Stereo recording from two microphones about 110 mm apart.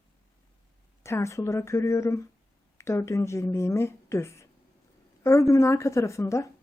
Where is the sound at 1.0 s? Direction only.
25° left (ahead or behind).